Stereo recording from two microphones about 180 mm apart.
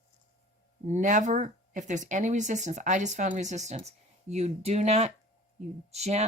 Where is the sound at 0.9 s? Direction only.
40° right (ahead or behind).